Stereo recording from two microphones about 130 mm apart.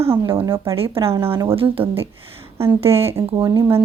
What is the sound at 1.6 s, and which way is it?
Speech, 45° right (ahead or behind).